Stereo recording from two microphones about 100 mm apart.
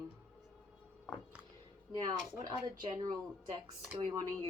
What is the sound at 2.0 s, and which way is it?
Speech, 45° right (ahead or behind).